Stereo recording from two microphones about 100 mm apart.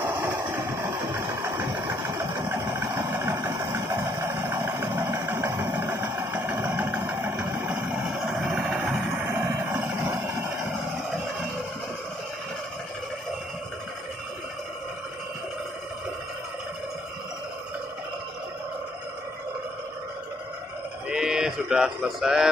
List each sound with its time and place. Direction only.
0.0 s vehicle: 20° right (ahead or behind)
1.3 s vehicle: 30° right (ahead or behind)
21.1 s livestock: 5° right (ahead or behind)